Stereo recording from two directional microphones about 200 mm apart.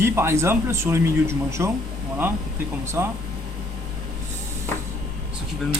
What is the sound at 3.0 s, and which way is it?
Speech, 10° right (ahead or behind).